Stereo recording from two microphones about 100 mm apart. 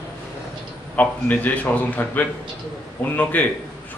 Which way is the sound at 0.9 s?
15° left (ahead or behind).